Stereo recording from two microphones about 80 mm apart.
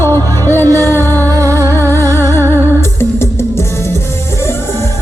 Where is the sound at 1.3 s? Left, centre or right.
Right.